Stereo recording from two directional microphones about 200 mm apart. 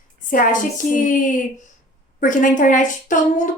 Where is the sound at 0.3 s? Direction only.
40° left (ahead or behind).